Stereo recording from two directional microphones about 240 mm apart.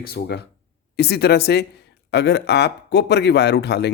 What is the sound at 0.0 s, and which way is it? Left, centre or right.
Speech, left.